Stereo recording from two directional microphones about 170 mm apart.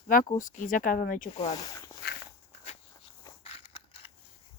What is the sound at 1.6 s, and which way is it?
Walk, 20° left (ahead or behind).